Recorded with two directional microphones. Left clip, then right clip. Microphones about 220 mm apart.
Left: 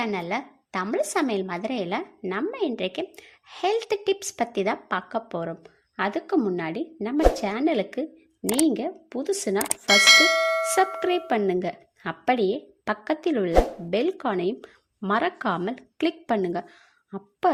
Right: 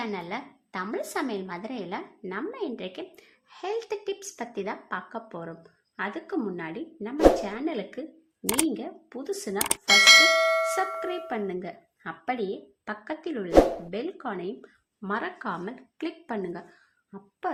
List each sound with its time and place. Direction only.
0.0 s a woman's voice: 30° left (ahead or behind)
9.6 s speech: centre (ahead or behind)
11.3 s a woman's voice: 40° left (ahead or behind)